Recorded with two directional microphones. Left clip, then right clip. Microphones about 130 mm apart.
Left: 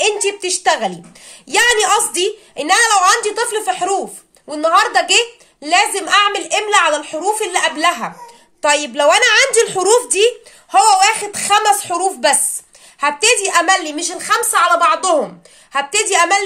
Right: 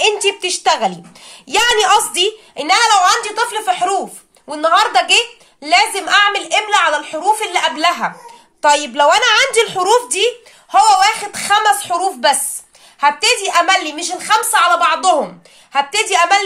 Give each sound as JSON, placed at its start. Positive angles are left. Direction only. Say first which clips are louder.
{"t": 0.0, "sound": "a woman's voice", "louder": "right 2 dB", "side_deg": 20}